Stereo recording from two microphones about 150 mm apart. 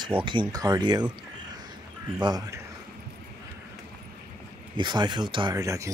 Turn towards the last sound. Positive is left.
turn(degrees=-20)  # may be behind; listen again after turning